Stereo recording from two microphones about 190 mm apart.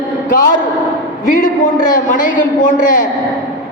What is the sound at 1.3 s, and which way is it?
A man's voice, 45° left (ahead or behind).